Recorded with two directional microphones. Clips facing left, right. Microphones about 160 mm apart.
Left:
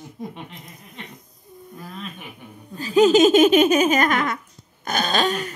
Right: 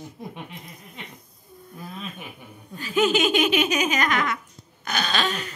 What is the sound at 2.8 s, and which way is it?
Laughter, 35° left (ahead or behind).